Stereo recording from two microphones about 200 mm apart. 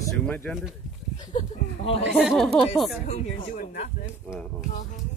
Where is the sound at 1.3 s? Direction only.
25° left (ahead or behind).